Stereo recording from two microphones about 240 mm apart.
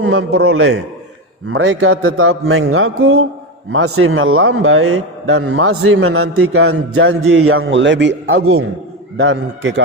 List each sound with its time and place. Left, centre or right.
0.0 s a man's voice: right